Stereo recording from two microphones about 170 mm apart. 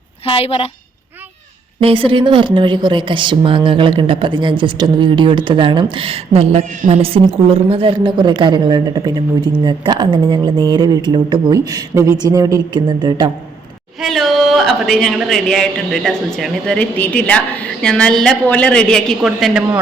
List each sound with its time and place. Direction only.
0.3 s a woman's voice: 35° left (ahead or behind)
1.8 s speech: 30° right (ahead or behind)
14.0 s a man's voice: centre (ahead or behind)